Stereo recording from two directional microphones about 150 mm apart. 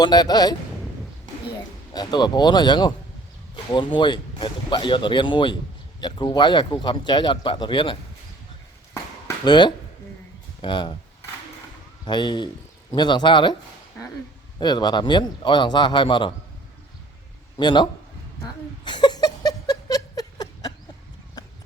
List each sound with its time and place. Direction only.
0.0 s speech: 25° left (ahead or behind)
1.9 s speech: 30° left (ahead or behind)
9.4 s speech: 30° left (ahead or behind)
12.0 s speech: 30° left (ahead or behind)
14.6 s speech: 30° left (ahead or behind)
17.6 s speech: 30° left (ahead or behind)
18.9 s a sound: 30° left (ahead or behind)